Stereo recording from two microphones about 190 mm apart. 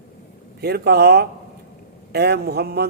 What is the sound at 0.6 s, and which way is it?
A man's voice, 55° right (ahead or behind).